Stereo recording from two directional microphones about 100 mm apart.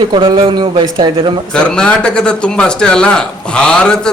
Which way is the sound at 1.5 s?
10° left (ahead or behind).